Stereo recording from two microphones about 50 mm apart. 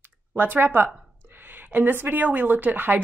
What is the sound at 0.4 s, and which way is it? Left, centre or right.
Speech, right.